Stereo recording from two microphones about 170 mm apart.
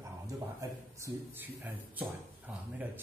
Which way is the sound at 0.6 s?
15° right (ahead or behind).